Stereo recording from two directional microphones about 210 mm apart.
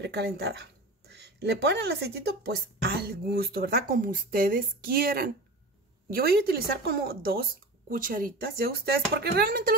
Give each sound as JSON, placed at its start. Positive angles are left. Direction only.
{"t": 0.0, "sound": "speech", "side_deg": -50}